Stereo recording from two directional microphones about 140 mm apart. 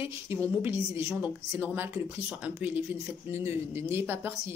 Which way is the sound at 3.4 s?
20° right (ahead or behind).